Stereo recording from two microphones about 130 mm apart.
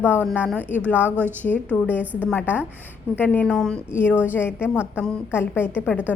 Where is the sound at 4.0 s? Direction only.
15° left (ahead or behind).